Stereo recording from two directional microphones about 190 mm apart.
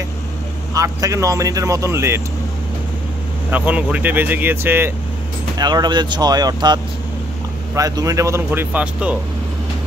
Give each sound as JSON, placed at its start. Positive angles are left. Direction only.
{"t": 0.7, "sound": "speech", "side_deg": -15}
{"t": 3.4, "sound": "speech", "side_deg": -10}
{"t": 5.6, "sound": "speech", "side_deg": -20}